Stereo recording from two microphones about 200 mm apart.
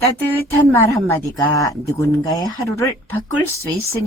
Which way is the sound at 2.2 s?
20° left (ahead or behind).